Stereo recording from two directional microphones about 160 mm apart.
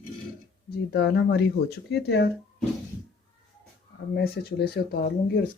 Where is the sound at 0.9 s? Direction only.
90° left.